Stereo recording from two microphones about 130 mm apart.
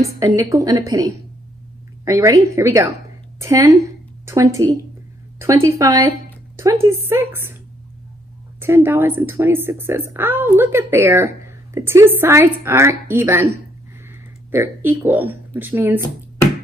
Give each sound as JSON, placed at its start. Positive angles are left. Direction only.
{"t": 0.0, "sound": "a woman's voice", "side_deg": -25}
{"t": 8.5, "sound": "speech", "side_deg": -15}
{"t": 14.5, "sound": "speech", "side_deg": -15}